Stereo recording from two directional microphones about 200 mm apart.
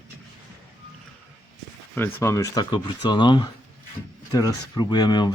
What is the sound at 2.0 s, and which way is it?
Speech, 10° left (ahead or behind).